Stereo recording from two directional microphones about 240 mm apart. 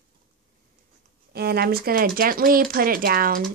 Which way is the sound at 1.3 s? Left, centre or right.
Right.